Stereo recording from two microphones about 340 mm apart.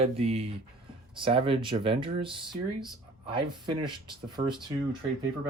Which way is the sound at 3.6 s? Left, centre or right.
Centre.